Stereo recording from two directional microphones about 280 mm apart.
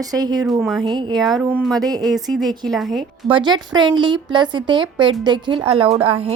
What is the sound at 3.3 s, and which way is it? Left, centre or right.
A woman's voice, centre.